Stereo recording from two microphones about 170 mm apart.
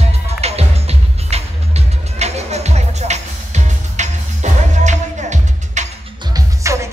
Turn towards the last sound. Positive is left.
turn(degrees=-15)  # may be behind; listen again after turning